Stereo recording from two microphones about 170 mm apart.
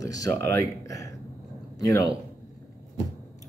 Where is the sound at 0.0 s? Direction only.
20° left (ahead or behind).